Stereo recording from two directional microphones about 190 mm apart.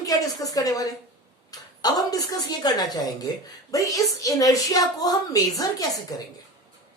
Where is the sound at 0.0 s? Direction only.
20° left (ahead or behind).